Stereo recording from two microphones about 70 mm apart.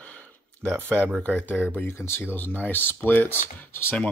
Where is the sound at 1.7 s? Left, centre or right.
Left.